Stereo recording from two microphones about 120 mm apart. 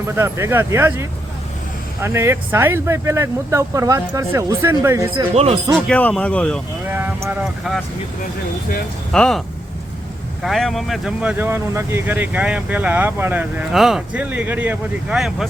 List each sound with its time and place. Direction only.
0.2 s speech: 20° right (ahead or behind)
5.3 s speech: 60° right (ahead or behind)
5.9 s speech: 10° left (ahead or behind)
6.8 s vehicle: 15° right (ahead or behind)
9.1 s speech: 5° left (ahead or behind)
10.4 s speech: centre (ahead or behind)
11.2 s speech: 15° right (ahead or behind)
13.7 s speech: 5° right (ahead or behind)
14.2 s speech: 15° right (ahead or behind)